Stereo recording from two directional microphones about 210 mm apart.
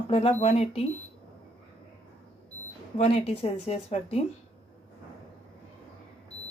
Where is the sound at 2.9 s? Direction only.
30° left (ahead or behind).